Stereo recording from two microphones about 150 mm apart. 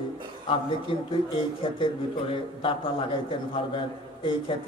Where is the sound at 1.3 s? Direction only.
35° left (ahead or behind).